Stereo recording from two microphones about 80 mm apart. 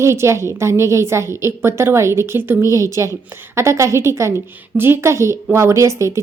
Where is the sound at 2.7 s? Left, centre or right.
Right.